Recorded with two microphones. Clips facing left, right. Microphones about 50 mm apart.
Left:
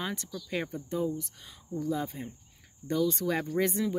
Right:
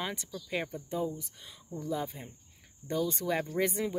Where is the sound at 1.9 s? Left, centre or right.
Centre.